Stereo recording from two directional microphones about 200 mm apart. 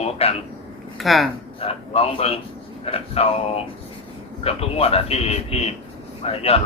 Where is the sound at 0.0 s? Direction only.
30° left (ahead or behind).